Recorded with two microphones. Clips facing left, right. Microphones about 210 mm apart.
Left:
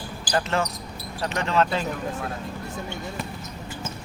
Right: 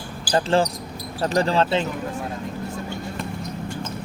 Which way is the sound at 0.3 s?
30° right (ahead or behind).